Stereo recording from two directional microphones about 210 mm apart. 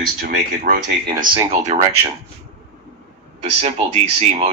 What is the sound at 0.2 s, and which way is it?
Speech, 40° right (ahead or behind).